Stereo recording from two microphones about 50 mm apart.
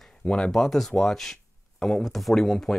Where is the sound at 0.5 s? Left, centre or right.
Centre.